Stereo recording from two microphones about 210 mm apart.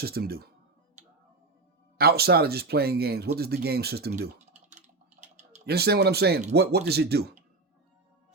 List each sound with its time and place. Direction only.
0.0 s speech: 45° right (ahead or behind)
1.0 s music: 35° right (ahead or behind)
2.0 s speech: 45° right (ahead or behind)
5.2 s typing: 30° right (ahead or behind)
5.6 s speech: 50° right (ahead or behind)